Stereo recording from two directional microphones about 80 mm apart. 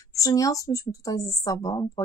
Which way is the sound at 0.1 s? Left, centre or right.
Left.